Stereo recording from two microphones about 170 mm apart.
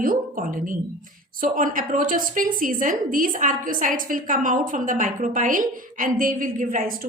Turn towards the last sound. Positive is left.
turn(degrees=-55)  # may be behind; listen again after turning